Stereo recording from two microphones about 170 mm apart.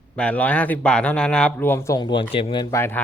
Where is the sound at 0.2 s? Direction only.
10° left (ahead or behind); by 2.7 s 30° left (ahead or behind).